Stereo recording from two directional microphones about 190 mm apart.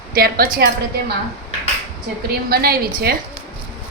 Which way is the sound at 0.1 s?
50° right (ahead or behind).